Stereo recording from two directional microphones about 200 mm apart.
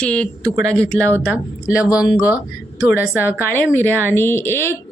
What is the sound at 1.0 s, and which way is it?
Speech, 10° right (ahead or behind).